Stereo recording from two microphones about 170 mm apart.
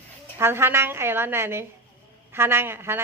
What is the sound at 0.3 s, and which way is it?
A woman's voice, 15° right (ahead or behind).